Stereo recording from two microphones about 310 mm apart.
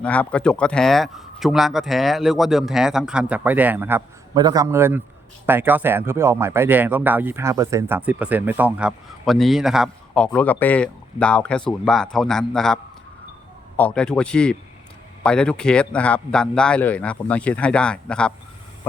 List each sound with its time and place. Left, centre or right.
0.0 s speech: centre